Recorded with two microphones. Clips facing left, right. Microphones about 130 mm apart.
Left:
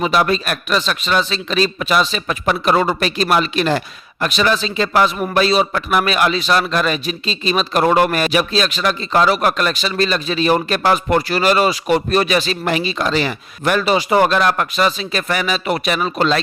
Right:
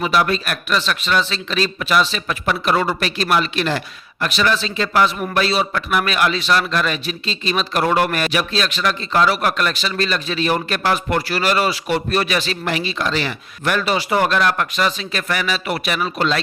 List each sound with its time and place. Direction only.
0.0 s a man's voice: 25° left (ahead or behind)
0.8 s a man's voice: 15° left (ahead or behind)
6.3 s a man's voice: 15° left (ahead or behind)
6.6 s a man's voice: 25° left (ahead or behind)